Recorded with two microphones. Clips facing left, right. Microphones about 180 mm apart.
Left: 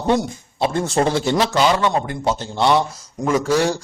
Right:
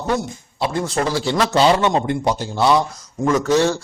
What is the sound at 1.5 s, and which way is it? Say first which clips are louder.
Speech: right 4 dB; 30° right (ahead or behind).